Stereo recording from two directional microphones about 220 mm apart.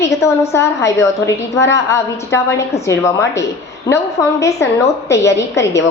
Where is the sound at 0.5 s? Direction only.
10° left (ahead or behind).